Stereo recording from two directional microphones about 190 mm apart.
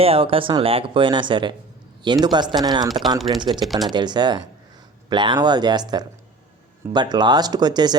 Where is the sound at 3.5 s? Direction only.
Centre (ahead or behind).